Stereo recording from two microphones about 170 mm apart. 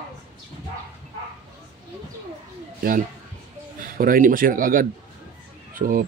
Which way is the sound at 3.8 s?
55° right (ahead or behind).